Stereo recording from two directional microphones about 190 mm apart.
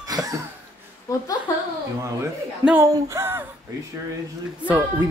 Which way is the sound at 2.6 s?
5° right (ahead or behind).